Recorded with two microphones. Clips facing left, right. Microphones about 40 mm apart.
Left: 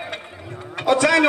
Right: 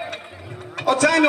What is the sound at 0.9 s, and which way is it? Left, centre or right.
Speech, centre.